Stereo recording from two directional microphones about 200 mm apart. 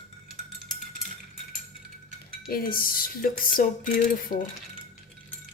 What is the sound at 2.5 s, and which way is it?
Speech, 45° left (ahead or behind).